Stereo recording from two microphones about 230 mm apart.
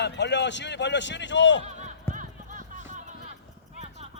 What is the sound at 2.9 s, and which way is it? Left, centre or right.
Music, right.